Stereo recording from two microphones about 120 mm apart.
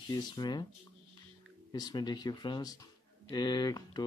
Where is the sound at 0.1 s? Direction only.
35° left (ahead or behind).